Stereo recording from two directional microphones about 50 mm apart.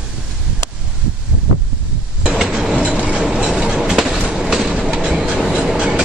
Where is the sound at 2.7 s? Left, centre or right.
Right.